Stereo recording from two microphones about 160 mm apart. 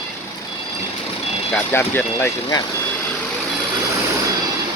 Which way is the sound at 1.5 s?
10° left (ahead or behind).